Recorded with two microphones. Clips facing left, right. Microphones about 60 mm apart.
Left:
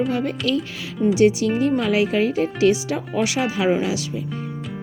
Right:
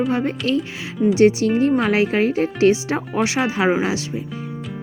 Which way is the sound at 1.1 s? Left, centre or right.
Right.